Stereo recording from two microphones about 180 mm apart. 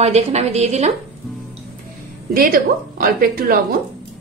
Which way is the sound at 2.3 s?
55° right (ahead or behind).